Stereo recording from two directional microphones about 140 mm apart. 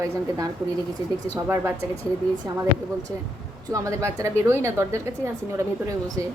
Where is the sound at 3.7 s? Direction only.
20° right (ahead or behind).